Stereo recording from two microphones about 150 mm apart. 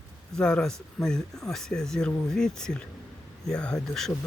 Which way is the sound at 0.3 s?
5° left (ahead or behind).